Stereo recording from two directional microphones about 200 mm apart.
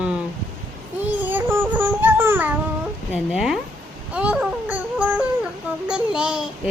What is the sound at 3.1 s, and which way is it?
Speech, centre (ahead or behind).